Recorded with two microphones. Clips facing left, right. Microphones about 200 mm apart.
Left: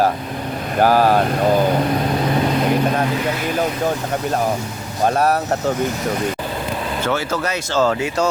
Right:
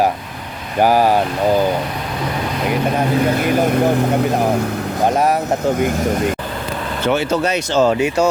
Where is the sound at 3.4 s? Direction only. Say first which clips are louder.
Right 5 dB; 55° right (ahead or behind).